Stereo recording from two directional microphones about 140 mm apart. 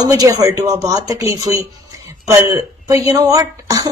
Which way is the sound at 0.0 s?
25° right (ahead or behind).